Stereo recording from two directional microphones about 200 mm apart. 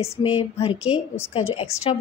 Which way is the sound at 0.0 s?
25° left (ahead or behind).